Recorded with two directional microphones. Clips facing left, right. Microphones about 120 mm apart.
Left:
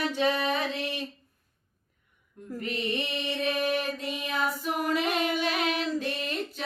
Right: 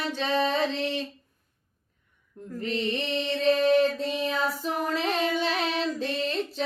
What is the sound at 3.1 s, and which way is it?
Mantra, 10° left (ahead or behind).